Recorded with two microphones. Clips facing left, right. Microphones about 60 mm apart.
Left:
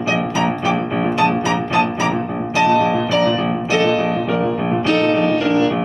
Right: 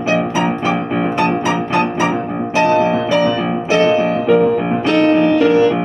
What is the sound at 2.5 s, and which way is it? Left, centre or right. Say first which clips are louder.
Music: right 1 dB; right.